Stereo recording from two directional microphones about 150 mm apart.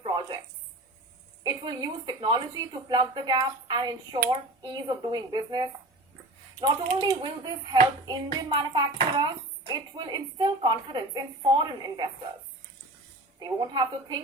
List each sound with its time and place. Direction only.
0.0 s a sound: 30° right (ahead or behind)
1.5 s speech: 30° right (ahead or behind)
7.0 s speech: 30° right (ahead or behind)
13.4 s speech: 30° right (ahead or behind)